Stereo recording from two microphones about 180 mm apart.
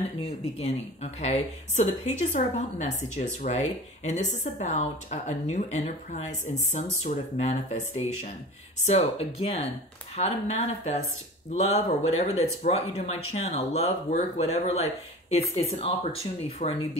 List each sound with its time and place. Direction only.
1.2 s a woman's voice: 40° left (ahead or behind)